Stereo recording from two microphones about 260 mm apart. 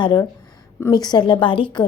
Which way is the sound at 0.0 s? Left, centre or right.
Centre.